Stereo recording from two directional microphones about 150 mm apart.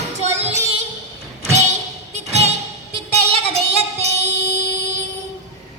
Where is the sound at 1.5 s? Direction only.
50° right (ahead or behind).